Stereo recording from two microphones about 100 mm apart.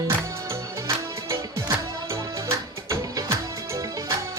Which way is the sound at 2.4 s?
30° right (ahead or behind).